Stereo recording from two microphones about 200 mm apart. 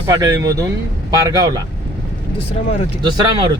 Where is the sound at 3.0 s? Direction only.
20° right (ahead or behind).